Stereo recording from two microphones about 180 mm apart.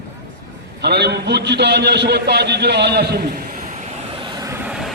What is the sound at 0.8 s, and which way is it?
A man's voice, 65° right (ahead or behind).